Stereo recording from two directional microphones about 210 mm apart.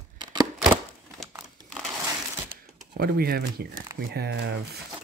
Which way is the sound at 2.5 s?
45° right (ahead or behind).